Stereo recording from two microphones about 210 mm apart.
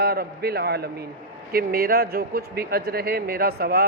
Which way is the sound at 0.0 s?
45° right (ahead or behind).